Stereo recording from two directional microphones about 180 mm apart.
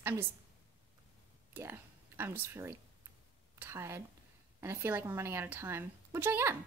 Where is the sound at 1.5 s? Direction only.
10° right (ahead or behind).